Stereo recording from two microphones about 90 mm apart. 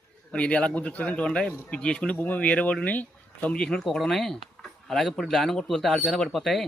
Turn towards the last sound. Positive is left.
turn(degrees=0)  # may be behind; listen again after turning